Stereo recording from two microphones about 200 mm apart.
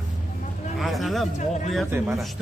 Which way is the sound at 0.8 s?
Centre (ahead or behind).